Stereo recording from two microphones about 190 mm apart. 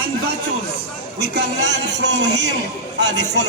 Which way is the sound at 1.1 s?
60° right (ahead or behind).